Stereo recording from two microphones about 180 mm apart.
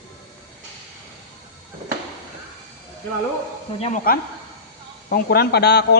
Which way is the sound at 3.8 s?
50° left (ahead or behind).